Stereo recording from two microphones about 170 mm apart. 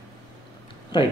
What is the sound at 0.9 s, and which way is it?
Speech, 30° left (ahead or behind).